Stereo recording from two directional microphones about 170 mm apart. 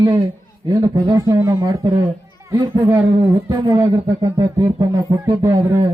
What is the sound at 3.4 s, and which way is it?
Speech, 25° right (ahead or behind).